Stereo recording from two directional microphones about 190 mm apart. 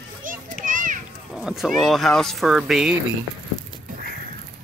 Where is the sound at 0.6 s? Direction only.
45° right (ahead or behind).